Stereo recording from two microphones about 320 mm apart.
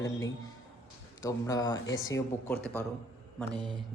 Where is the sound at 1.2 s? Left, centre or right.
Centre.